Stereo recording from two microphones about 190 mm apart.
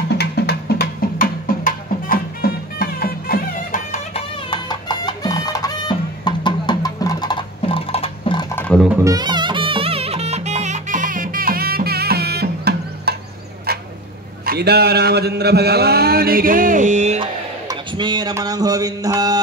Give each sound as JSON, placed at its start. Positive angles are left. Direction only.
{"t": 0.2, "sound": "music", "side_deg": 60}
{"t": 4.1, "sound": "music", "side_deg": 25}
{"t": 8.5, "sound": "music", "side_deg": 5}
{"t": 9.0, "sound": "music", "side_deg": -20}
{"t": 13.7, "sound": "a sound", "side_deg": -55}
{"t": 14.4, "sound": "a man's voice", "side_deg": -55}
{"t": 17.2, "sound": "a man's voice", "side_deg": -25}